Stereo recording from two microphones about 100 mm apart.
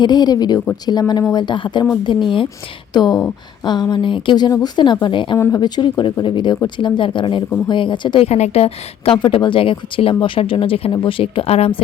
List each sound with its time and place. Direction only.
0.0 s a woman's voice: 45° left (ahead or behind)
2.9 s a woman's voice: 45° left (ahead or behind)
8.3 s a woman's voice: 90° left
9.1 s speech: 50° left (ahead or behind); by 11.8 s 90° left